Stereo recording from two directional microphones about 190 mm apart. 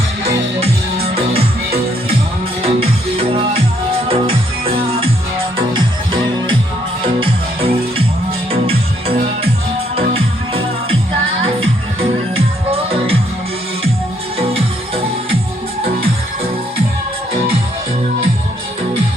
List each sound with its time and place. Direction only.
1.4 s music: 30° right (ahead or behind)
7.0 s music: 30° right (ahead or behind)
11.4 s music: 30° right (ahead or behind)
14.3 s music: 30° right (ahead or behind)